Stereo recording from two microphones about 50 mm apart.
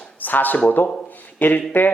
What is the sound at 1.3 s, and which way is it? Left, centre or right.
Speech, left.